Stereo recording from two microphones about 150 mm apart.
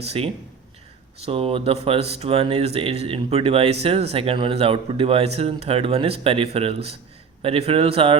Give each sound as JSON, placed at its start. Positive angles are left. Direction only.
{"t": 0.2, "sound": "speech", "side_deg": -40}